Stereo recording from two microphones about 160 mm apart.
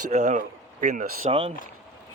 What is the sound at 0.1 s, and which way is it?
Speech, 50° right (ahead or behind).